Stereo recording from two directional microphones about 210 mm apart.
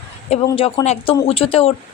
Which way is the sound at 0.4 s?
20° left (ahead or behind).